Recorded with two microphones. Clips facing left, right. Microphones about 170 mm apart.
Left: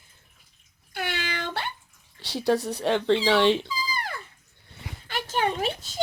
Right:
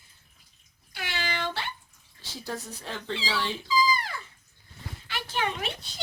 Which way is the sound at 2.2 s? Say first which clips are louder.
Left 13 dB; 70° left (ahead or behind).